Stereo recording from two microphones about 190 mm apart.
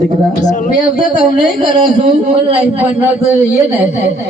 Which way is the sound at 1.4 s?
25° right (ahead or behind).